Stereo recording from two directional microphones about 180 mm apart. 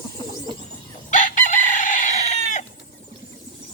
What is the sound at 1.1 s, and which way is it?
Chicken, 45° left (ahead or behind).